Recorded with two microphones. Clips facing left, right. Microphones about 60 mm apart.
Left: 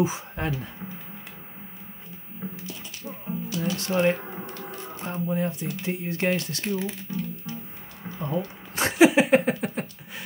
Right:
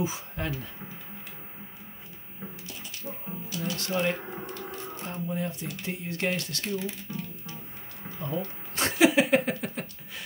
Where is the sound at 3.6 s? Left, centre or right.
Left.